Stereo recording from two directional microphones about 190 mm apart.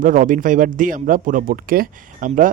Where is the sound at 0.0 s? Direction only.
45° right (ahead or behind).